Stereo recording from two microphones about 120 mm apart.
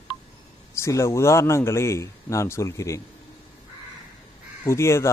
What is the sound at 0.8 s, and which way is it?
Speech, 25° left (ahead or behind).